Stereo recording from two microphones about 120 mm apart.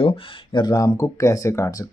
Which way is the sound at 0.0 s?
50° left (ahead or behind).